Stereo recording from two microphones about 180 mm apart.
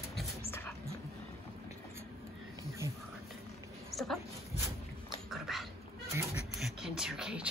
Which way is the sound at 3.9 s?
Centre (ahead or behind).